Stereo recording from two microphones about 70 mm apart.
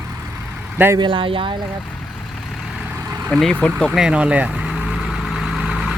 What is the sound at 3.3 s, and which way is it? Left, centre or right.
Speech, centre.